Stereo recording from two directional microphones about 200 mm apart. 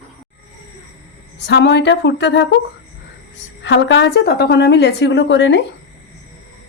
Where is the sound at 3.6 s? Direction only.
60° left (ahead or behind).